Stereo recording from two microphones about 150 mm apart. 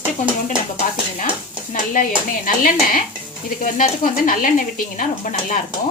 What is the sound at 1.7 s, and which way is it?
A woman's voice, 65° left (ahead or behind).